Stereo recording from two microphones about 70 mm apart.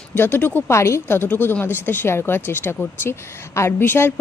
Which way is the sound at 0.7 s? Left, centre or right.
Left.